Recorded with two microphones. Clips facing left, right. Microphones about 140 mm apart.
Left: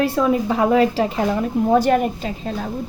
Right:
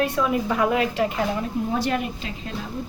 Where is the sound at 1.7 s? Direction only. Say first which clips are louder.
Left 11 dB; 45° left (ahead or behind).